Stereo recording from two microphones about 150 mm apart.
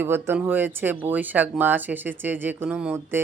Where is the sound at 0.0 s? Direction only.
15° right (ahead or behind).